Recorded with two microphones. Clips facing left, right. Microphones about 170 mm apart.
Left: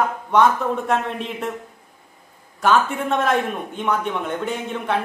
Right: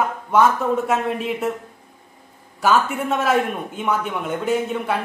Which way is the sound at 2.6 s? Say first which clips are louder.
Even; 5° right (ahead or behind).